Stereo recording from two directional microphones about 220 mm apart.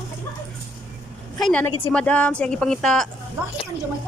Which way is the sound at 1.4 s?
5° left (ahead or behind).